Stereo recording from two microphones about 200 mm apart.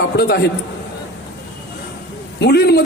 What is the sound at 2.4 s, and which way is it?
Speech, 55° left (ahead or behind).